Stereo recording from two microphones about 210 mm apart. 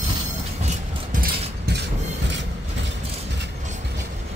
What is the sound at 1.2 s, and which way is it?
Mechanisms, 50° right (ahead or behind).